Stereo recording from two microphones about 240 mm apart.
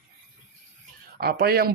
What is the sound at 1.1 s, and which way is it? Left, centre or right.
Speech, right.